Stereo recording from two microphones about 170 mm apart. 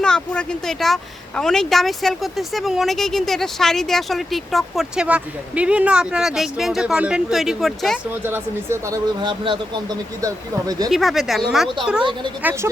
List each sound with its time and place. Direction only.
0.0 s speech: 5° left (ahead or behind)
8.2 s speech: 15° right (ahead or behind)
9.2 s speech: 30° right (ahead or behind)
10.8 s speech: centre (ahead or behind)